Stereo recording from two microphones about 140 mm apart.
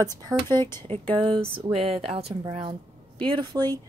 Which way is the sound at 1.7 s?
45° right (ahead or behind).